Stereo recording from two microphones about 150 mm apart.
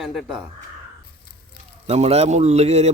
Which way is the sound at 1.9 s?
45° right (ahead or behind).